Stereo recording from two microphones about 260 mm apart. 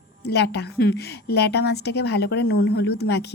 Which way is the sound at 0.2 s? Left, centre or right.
Left.